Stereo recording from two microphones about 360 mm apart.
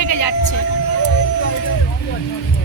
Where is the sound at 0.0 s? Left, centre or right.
Left.